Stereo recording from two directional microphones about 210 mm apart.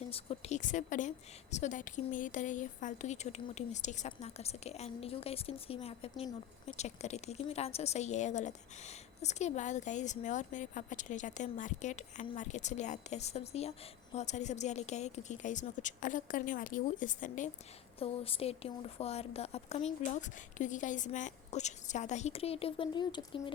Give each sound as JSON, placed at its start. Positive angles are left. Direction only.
{"t": 0.1, "sound": "a woman's voice", "side_deg": 30}
{"t": 18.0, "sound": "a woman's voice", "side_deg": 25}